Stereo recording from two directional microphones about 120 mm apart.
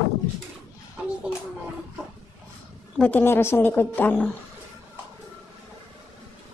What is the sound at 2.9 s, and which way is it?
A woman's voice, 15° left (ahead or behind).